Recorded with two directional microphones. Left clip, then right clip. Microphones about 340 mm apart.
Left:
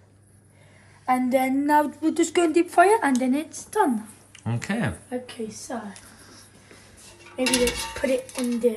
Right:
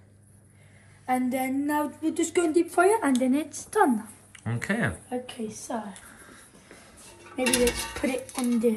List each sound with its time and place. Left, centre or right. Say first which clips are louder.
1.0 s speech: left 5 dB; centre
6.7 s dishes: even; centre